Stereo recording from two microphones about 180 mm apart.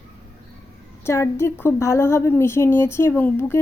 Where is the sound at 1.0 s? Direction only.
15° left (ahead or behind).